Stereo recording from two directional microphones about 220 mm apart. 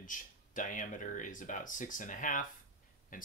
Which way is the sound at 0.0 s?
35° left (ahead or behind).